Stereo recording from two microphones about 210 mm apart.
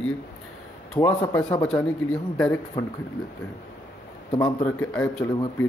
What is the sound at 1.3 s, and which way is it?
Speech, 5° left (ahead or behind).